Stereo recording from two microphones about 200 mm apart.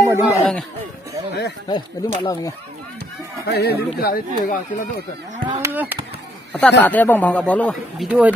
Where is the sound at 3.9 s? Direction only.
50° left (ahead or behind).